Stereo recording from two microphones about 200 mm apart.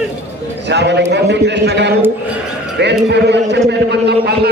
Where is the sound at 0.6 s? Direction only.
60° right (ahead or behind).